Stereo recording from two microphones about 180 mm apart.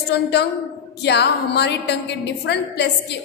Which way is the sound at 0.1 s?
70° left (ahead or behind).